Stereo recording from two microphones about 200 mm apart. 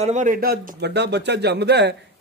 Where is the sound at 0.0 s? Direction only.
35° right (ahead or behind).